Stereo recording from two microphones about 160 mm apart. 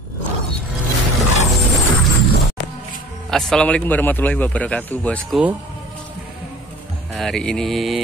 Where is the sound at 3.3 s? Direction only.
5° left (ahead or behind).